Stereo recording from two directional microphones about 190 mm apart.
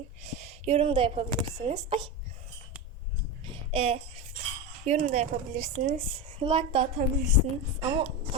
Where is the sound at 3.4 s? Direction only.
30° right (ahead or behind).